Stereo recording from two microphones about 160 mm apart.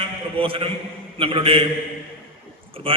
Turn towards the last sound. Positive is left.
turn(degrees=-35)  # may be behind; listen again after turning